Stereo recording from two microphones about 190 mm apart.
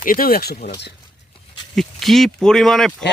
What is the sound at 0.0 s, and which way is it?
Speech, 50° left (ahead or behind).